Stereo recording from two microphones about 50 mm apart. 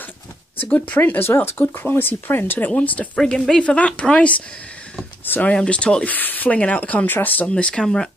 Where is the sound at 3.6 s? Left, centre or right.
Left.